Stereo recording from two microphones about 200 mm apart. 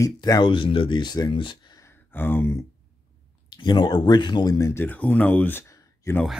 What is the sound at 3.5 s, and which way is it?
Speech, 20° left (ahead or behind).